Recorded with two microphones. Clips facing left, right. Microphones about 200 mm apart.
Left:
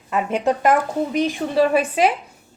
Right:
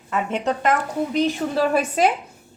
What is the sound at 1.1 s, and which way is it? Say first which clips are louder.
Speech: right 1 dB; centre (ahead or behind).